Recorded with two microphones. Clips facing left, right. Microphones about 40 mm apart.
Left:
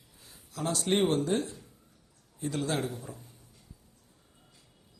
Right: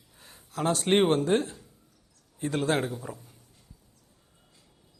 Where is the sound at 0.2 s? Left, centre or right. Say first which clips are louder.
Right 5 dB; right.